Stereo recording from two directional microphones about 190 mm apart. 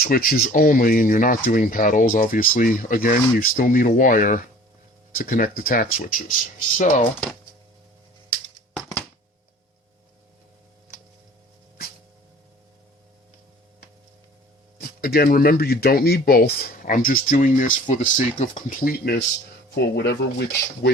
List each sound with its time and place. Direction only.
0.0 s speech: 50° left (ahead or behind)
6.7 s speech: 35° left (ahead or behind)
14.8 s speech: 55° left (ahead or behind)